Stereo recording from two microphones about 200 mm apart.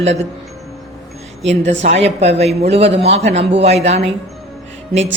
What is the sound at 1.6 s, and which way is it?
Speech, 65° right (ahead or behind).